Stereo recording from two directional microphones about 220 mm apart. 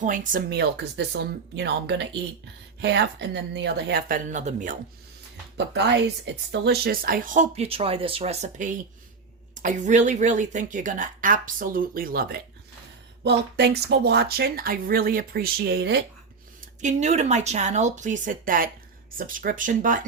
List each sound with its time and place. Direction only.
0.0 s speech: 35° right (ahead or behind)
5.5 s speech: 50° right (ahead or behind)
16.6 s speech: 30° right (ahead or behind)